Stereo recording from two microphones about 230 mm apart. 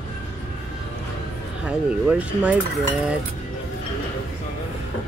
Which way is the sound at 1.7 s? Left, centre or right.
Centre.